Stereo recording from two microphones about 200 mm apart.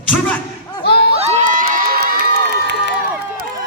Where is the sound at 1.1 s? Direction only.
40° right (ahead or behind); by 2.9 s 55° right (ahead or behind).